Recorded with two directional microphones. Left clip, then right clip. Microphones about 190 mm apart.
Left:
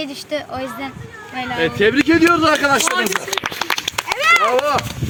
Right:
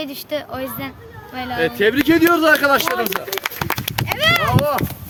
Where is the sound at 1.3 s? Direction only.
20° right (ahead or behind).